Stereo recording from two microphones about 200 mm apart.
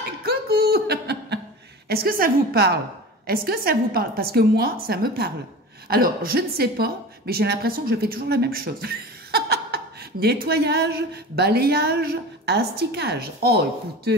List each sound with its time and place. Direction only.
0.2 s a woman's voice: 50° right (ahead or behind)